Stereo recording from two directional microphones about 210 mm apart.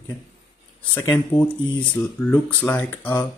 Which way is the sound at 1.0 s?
15° left (ahead or behind).